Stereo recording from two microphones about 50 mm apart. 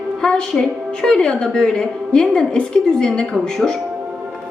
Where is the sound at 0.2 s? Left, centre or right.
Centre.